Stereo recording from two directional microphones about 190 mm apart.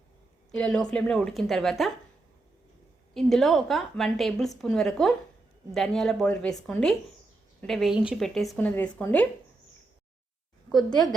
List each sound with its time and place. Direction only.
0.5 s a woman's voice: 5° left (ahead or behind)
3.2 s a woman's voice: centre (ahead or behind)
10.8 s a woman's voice: 20° left (ahead or behind)